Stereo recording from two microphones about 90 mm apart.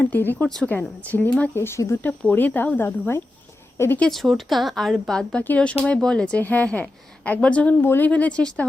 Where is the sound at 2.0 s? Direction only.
20° left (ahead or behind).